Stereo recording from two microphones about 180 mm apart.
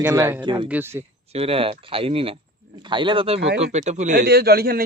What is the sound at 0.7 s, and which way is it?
Speech, 10° right (ahead or behind).